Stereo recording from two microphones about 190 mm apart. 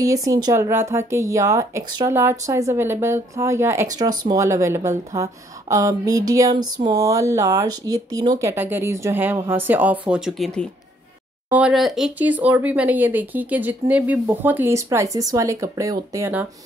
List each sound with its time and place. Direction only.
0.0 s speech: 15° right (ahead or behind)